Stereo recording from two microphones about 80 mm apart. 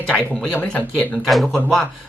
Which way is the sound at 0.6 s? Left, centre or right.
Centre.